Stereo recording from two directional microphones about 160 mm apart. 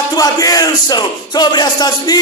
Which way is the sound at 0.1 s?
20° left (ahead or behind).